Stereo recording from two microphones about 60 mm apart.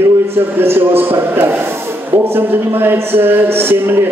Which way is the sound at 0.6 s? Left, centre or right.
Right.